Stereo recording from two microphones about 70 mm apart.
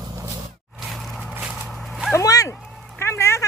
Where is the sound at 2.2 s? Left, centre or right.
Left.